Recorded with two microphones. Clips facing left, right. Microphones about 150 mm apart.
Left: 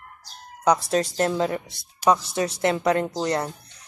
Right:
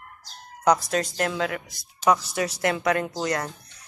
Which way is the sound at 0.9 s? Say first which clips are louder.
Left 3 dB; 35° left (ahead or behind).